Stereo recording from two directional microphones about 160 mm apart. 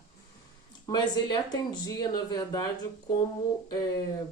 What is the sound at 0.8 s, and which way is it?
Speech, 25° left (ahead or behind).